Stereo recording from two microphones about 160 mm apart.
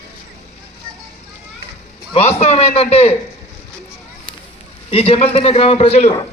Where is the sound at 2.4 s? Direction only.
40° left (ahead or behind).